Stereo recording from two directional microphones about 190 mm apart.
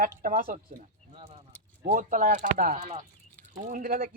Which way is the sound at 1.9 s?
45° right (ahead or behind).